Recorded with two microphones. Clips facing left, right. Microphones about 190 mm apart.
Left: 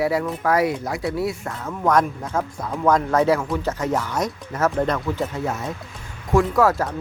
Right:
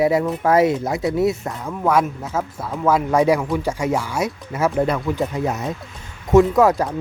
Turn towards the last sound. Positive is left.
turn(degrees=-15)  # may be behind; listen again after turning